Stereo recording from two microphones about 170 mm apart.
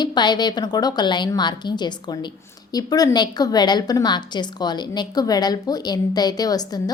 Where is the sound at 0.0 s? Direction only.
25° left (ahead or behind).